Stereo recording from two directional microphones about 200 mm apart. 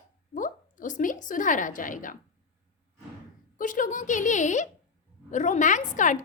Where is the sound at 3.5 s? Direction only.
40° left (ahead or behind).